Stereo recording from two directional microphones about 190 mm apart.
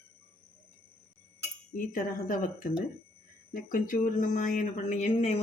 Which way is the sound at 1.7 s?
45° left (ahead or behind).